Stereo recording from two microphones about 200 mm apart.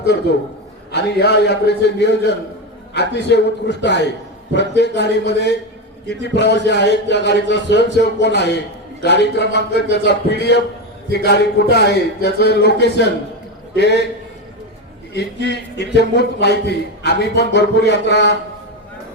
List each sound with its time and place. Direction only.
0.9 s a man's voice: 55° left (ahead or behind)
15.1 s a man's voice: 55° left (ahead or behind)